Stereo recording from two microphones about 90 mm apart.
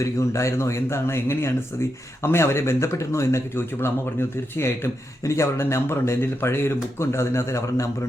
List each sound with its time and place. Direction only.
0.0 s a man's voice: 35° left (ahead or behind)